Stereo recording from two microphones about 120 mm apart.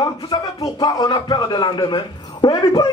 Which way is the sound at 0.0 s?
35° left (ahead or behind).